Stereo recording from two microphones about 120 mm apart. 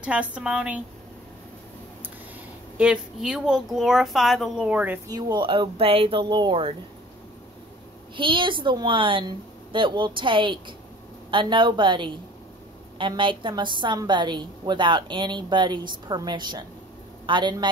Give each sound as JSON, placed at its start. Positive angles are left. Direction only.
{"t": 0.0, "sound": "a woman's voice", "side_deg": -10}
{"t": 2.8, "sound": "speech", "side_deg": -5}
{"t": 4.6, "sound": "a woman's voice", "side_deg": -15}
{"t": 5.0, "sound": "speech", "side_deg": -35}
{"t": 6.2, "sound": "a woman's voice", "side_deg": -40}
{"t": 8.2, "sound": "a woman's voice", "side_deg": -45}